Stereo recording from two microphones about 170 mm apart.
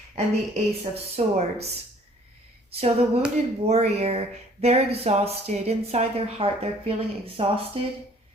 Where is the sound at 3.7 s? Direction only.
40° right (ahead or behind).